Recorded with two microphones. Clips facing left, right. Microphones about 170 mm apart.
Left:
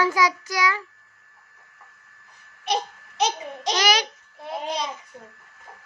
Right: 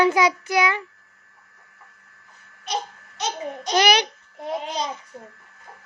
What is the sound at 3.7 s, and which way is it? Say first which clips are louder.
Speech: right 4 dB; 60° right (ahead or behind).